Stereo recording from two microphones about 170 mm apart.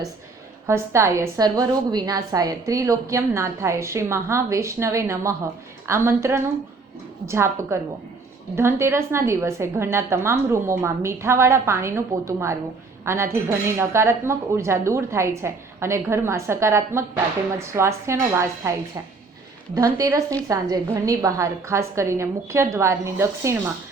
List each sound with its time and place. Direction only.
0.7 s a woman's voice: 15° right (ahead or behind)
19.7 s a woman's voice: 20° right (ahead or behind)